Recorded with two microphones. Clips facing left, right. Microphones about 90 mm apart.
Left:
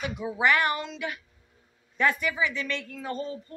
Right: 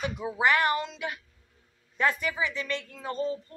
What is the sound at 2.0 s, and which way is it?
A woman's voice, 30° right (ahead or behind).